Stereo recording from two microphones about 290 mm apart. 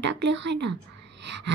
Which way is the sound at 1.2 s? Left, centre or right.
Right.